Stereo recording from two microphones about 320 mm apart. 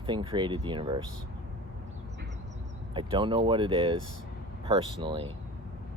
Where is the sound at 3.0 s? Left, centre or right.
Centre.